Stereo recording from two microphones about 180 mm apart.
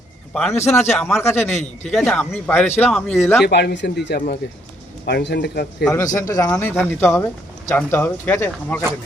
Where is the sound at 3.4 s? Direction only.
70° left (ahead or behind).